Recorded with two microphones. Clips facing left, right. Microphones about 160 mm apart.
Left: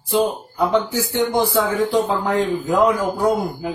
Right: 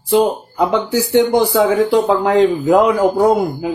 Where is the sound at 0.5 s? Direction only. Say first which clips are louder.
Right 3 dB; 85° right.